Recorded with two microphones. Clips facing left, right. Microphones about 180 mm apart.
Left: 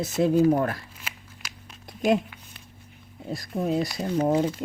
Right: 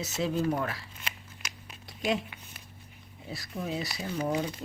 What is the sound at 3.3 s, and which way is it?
Speech, 50° left (ahead or behind).